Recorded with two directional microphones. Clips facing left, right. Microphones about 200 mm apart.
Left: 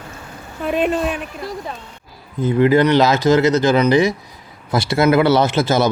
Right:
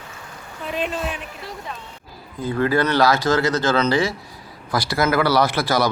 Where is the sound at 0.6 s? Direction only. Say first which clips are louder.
Left 7 dB; 55° left (ahead or behind).